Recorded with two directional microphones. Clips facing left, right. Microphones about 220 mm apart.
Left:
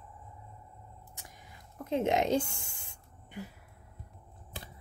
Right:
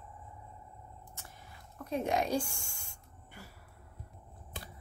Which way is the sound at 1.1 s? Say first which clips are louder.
Even; 15° left (ahead or behind).